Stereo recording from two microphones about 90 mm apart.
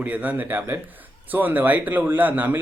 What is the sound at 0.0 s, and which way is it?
Speech, 15° right (ahead or behind).